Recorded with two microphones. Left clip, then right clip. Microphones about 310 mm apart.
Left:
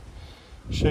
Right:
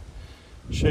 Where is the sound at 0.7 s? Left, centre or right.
Centre.